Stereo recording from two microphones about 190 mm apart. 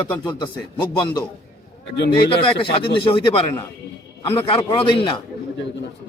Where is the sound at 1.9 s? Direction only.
60° left (ahead or behind).